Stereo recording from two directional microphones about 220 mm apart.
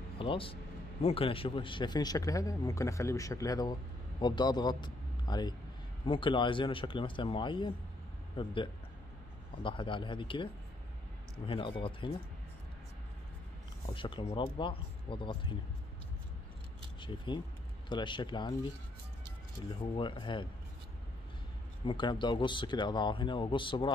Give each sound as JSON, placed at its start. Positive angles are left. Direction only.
{"t": 0.2, "sound": "a man's voice", "side_deg": 25}
{"t": 9.6, "sound": "speech", "side_deg": 20}
{"t": 13.8, "sound": "speech", "side_deg": 20}
{"t": 17.0, "sound": "speech", "side_deg": 20}
{"t": 19.7, "sound": "speech", "side_deg": 20}
{"t": 21.8, "sound": "speech", "side_deg": 20}